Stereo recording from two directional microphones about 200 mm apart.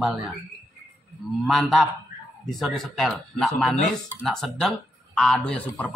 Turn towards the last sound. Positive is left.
turn(degrees=5)  # may be behind; listen again after turning